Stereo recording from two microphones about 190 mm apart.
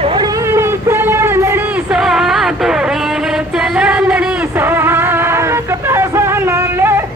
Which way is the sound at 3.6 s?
5° right (ahead or behind).